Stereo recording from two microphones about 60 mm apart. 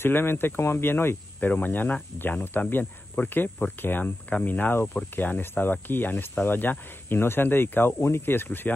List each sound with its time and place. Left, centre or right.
0.0 s speech: left